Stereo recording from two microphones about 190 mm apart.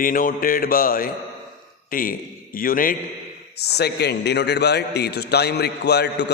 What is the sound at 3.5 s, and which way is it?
A man's voice, 60° left (ahead or behind).